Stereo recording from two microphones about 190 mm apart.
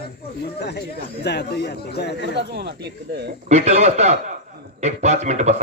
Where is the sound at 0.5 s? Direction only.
60° left (ahead or behind).